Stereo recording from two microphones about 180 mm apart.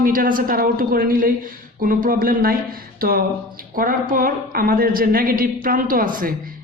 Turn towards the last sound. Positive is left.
turn(degrees=-50)  # may be behind; listen again after turning